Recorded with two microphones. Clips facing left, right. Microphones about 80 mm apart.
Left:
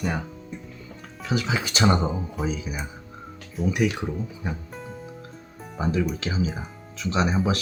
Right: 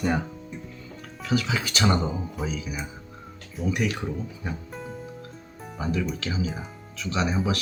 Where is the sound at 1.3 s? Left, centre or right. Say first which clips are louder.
Even; left.